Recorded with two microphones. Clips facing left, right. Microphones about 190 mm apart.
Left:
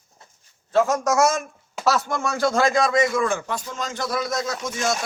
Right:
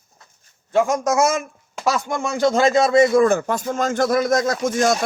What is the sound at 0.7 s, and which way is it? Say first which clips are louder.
A man's voice: right 1 dB; 15° right (ahead or behind).